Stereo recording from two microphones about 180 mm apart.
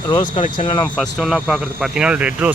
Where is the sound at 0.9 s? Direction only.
Centre (ahead or behind).